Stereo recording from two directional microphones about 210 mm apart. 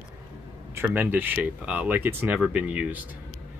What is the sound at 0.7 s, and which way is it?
Speech, 10° right (ahead or behind).